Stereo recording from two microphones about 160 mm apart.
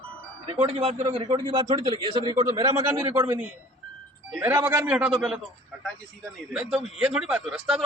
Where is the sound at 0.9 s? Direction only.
25° right (ahead or behind); by 5.4 s centre (ahead or behind).